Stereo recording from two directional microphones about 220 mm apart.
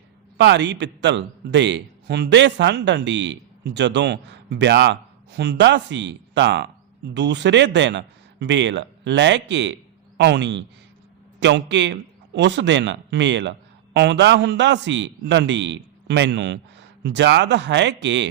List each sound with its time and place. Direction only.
0.3 s a man's voice: 55° right (ahead or behind)